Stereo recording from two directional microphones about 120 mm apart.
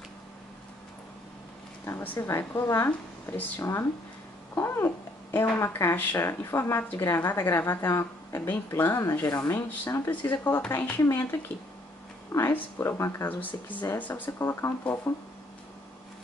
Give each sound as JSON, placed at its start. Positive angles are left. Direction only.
{"t": 1.9, "sound": "speech", "side_deg": 25}
{"t": 12.3, "sound": "speech", "side_deg": 20}